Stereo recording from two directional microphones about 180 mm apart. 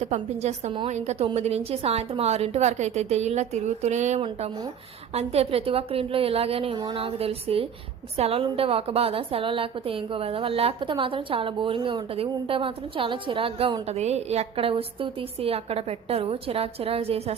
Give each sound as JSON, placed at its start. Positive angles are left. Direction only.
{"t": 0.0, "sound": "a woman's voice", "side_deg": -40}